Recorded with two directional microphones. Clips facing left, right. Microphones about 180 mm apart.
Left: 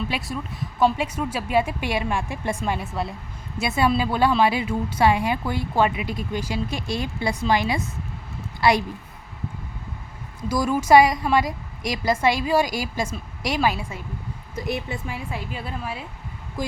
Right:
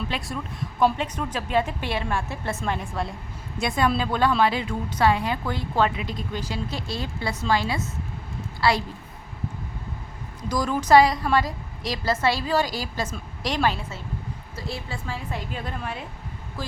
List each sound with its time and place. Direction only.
0.1 s a woman's voice: centre (ahead or behind); by 8.8 s 15° left (ahead or behind)
10.5 s a woman's voice: 10° left (ahead or behind)